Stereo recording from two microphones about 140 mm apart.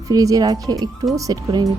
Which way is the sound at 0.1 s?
25° right (ahead or behind).